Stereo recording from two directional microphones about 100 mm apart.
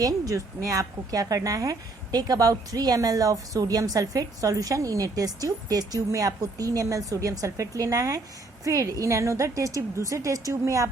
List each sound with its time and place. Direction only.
0.0 s a woman's voice: 35° right (ahead or behind)